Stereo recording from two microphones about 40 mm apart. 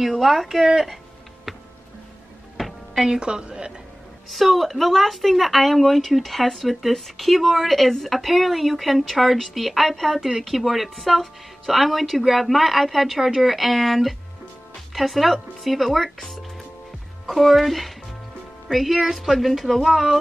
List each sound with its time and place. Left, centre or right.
0.4 s speech: centre
3.1 s a woman's voice: right
4.3 s speech: centre
17.3 s speech: centre